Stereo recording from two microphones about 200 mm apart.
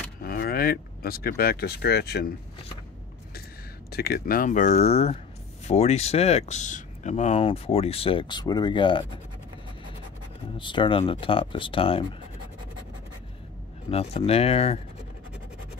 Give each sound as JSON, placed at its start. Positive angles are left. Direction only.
{"t": 0.2, "sound": "speech", "side_deg": 50}
{"t": 3.9, "sound": "speech", "side_deg": 50}
{"t": 10.6, "sound": "speech", "side_deg": 25}
{"t": 13.8, "sound": "speech", "side_deg": 30}